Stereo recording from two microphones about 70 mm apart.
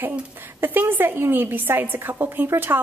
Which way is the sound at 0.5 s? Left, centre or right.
Right.